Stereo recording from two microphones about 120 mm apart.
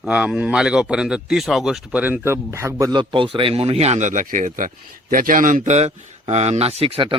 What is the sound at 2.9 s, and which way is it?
A man's voice, 45° right (ahead or behind).